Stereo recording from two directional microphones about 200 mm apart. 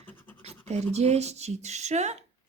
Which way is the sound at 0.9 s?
35° right (ahead or behind).